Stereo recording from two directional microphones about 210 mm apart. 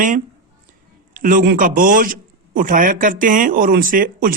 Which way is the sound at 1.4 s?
40° right (ahead or behind).